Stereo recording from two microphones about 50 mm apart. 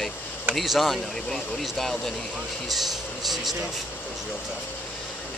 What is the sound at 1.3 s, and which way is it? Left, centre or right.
Speech, centre.